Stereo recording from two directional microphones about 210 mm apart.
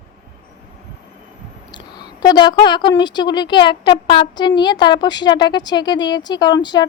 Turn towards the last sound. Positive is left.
turn(degrees=20)  # may be behind; listen again after turning